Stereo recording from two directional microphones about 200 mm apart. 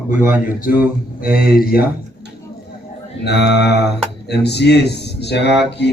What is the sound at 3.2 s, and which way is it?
Speech, 55° left (ahead or behind).